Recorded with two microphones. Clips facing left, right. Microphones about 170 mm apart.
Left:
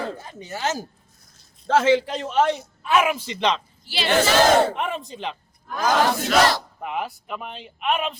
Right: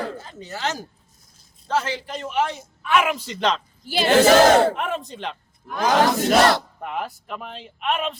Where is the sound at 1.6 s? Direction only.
90° left.